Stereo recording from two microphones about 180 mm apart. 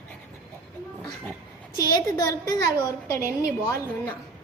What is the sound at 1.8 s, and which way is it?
A woman's voice, 20° left (ahead or behind).